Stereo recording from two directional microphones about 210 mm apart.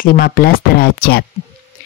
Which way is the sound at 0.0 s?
45° left (ahead or behind).